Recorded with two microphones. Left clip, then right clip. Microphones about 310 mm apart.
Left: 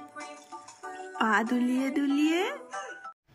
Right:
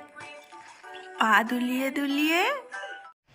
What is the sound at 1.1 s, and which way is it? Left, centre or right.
Speech, centre.